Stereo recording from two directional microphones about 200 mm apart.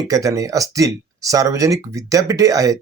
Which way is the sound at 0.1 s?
15° right (ahead or behind).